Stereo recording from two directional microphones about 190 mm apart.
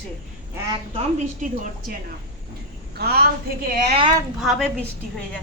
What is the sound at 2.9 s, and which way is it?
Speech, 55° right (ahead or behind).